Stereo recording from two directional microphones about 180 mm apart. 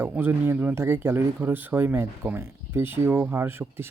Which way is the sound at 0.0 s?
10° right (ahead or behind).